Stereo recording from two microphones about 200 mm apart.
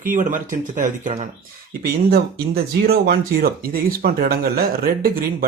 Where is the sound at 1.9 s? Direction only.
50° right (ahead or behind).